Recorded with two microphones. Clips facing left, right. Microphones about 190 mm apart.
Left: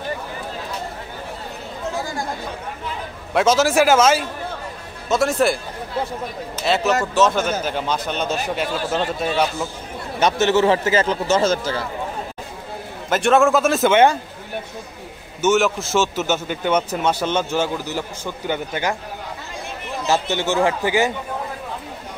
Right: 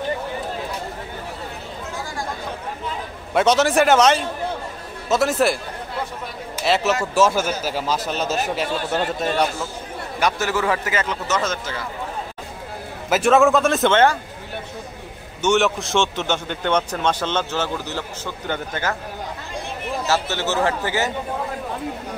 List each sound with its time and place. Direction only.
3.3 s a man's voice: centre (ahead or behind)
6.6 s a man's voice: centre (ahead or behind)
10.2 s a man's voice: 25° left (ahead or behind)
13.1 s a man's voice: centre (ahead or behind)
15.4 s a man's voice: centre (ahead or behind)
20.1 s a man's voice: 15° left (ahead or behind)